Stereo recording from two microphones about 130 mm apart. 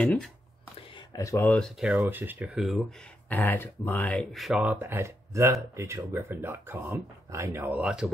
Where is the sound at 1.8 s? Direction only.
15° right (ahead or behind).